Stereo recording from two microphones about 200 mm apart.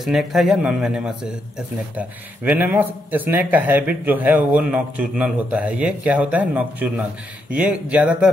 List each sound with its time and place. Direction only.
0.0 s speech: centre (ahead or behind)